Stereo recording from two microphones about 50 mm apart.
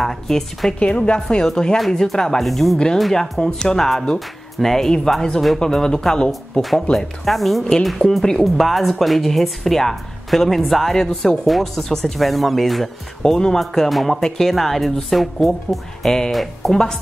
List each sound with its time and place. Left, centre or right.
0.0 s speech: centre
0.7 s a woman's voice: left
7.2 s speech: centre